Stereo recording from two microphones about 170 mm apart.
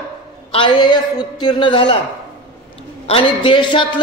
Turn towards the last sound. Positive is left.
turn(degrees=30)  # may be behind; listen again after turning